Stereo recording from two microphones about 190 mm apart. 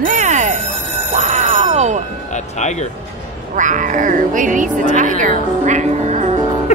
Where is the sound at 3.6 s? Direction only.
40° right (ahead or behind).